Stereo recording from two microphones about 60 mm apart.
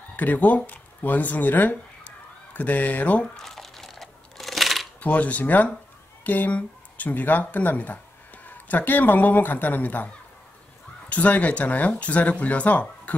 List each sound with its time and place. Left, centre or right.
0.1 s speech: left
3.3 s a sound: centre
5.0 s speech: left
11.1 s speech: left